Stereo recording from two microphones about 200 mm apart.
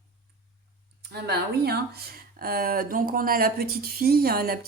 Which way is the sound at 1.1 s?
55° right (ahead or behind).